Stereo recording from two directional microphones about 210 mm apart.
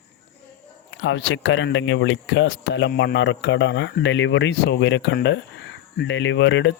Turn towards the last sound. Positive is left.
turn(degrees=60)  # may be behind; listen again after turning